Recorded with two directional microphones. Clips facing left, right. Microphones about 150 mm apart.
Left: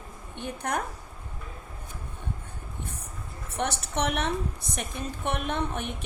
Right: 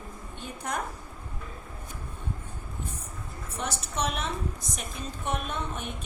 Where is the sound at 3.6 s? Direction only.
65° left (ahead or behind).